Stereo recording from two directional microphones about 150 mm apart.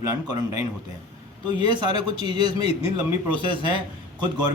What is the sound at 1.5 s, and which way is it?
Speech, 30° right (ahead or behind).